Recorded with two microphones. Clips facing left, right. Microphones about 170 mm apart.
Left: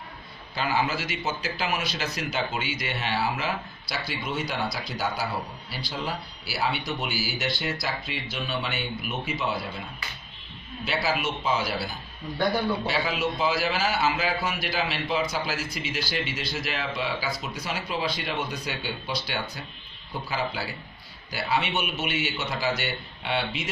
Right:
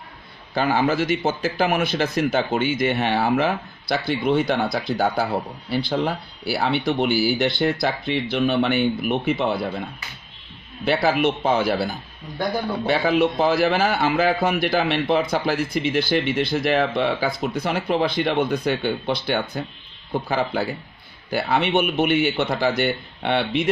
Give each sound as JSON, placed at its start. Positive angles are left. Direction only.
{"t": 0.6, "sound": "a man's voice", "side_deg": -50}
{"t": 10.9, "sound": "a man's voice", "side_deg": -55}